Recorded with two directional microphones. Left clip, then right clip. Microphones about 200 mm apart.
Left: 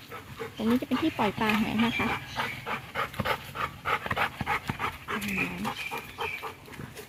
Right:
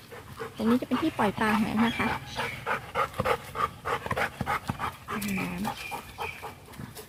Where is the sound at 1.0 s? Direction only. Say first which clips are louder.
Right 1 dB; centre (ahead or behind).